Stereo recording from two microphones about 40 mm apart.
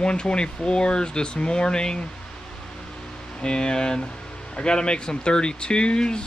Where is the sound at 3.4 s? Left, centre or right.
Left.